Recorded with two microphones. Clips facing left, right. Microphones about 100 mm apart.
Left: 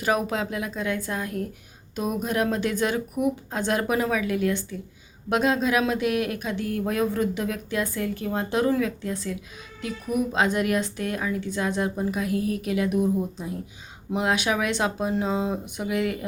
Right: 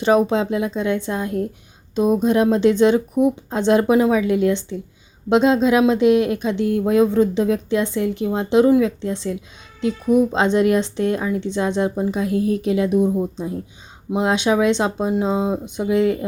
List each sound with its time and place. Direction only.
0.0 s speech: 30° right (ahead or behind)